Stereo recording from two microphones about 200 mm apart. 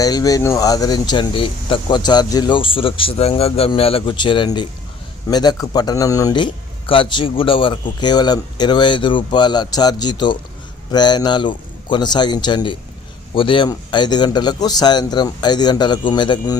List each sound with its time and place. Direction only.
0.0 s a man's voice: 20° left (ahead or behind)